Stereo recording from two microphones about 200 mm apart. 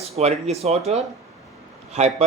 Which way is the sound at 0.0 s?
30° right (ahead or behind).